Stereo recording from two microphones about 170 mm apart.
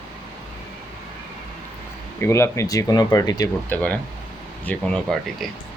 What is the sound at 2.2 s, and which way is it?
Speech, 15° left (ahead or behind).